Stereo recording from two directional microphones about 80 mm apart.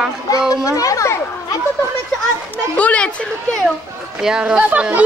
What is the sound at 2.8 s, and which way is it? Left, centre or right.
Speech, centre.